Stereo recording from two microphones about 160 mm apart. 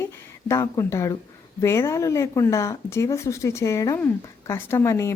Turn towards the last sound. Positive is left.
turn(degrees=15)  # may be behind; listen again after turning